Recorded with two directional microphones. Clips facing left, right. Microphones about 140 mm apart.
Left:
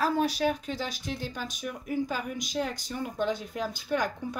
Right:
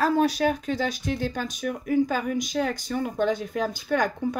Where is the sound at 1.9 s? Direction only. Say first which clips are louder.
Right 8 dB; 75° right (ahead or behind).